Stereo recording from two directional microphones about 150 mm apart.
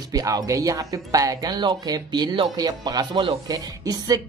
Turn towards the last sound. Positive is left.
turn(degrees=-25)  # may be behind; listen again after turning